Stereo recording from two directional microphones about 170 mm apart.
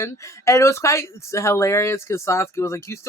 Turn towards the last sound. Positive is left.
turn(degrees=15)  # may be behind; listen again after turning